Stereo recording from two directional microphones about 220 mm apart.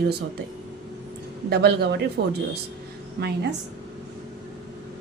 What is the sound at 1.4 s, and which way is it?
A woman's voice, 45° right (ahead or behind).